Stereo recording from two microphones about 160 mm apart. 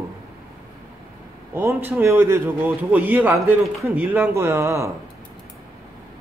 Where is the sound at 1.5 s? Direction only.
15° right (ahead or behind).